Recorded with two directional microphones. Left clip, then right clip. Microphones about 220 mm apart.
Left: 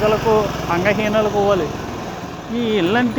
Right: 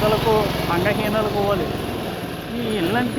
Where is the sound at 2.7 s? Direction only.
60° left (ahead or behind).